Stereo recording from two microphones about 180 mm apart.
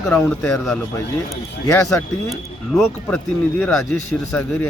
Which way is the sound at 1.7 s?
15° left (ahead or behind).